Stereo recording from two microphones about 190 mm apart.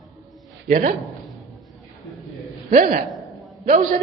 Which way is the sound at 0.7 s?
45° right (ahead or behind).